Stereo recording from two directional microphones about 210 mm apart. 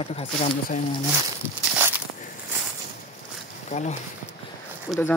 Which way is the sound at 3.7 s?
35° left (ahead or behind).